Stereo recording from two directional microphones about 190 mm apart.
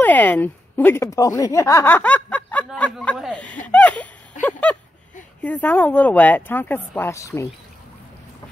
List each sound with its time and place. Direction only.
0.0 s speech: 10° left (ahead or behind)
3.6 s a sound: 5° left (ahead or behind)
5.4 s speech: 10° left (ahead or behind)